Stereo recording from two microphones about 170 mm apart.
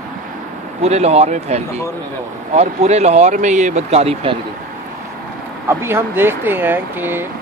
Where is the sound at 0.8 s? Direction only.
40° right (ahead or behind).